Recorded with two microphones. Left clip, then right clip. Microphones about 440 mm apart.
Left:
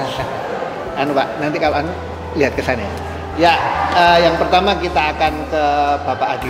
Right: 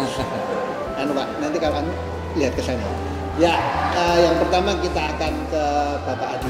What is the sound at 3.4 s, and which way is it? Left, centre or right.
Music, left.